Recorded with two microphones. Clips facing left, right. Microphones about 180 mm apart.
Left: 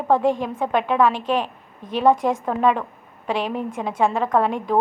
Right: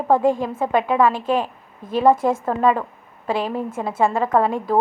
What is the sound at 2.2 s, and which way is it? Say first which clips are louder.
Speech: right 2 dB; 15° left (ahead or behind).